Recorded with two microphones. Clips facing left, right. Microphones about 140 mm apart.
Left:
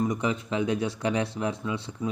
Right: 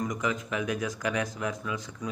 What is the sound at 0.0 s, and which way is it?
Speech, 30° left (ahead or behind).